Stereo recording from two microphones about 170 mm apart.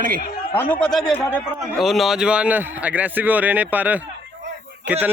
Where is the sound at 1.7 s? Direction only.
Centre (ahead or behind).